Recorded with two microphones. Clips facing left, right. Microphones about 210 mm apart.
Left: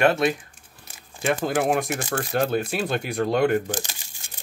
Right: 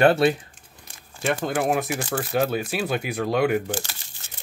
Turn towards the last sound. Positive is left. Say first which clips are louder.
# left 1 dB
turn(degrees=15)  # may be behind; listen again after turning